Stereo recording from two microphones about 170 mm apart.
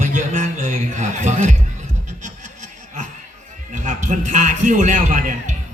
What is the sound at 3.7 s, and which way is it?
Music, 45° right (ahead or behind).